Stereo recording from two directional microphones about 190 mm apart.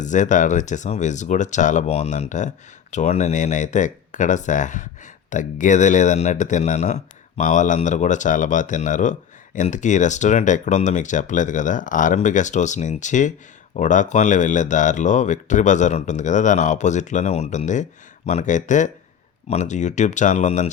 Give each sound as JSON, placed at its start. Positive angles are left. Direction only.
{"t": 0.0, "sound": "speech", "side_deg": 40}